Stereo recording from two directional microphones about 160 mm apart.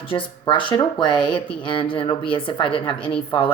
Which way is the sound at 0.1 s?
25° left (ahead or behind).